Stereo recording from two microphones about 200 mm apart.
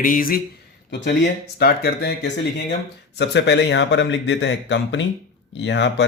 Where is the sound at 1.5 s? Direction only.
50° left (ahead or behind).